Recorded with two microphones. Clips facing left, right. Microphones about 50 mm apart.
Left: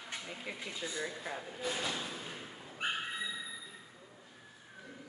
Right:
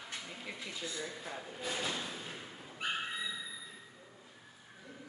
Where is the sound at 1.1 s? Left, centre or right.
Centre.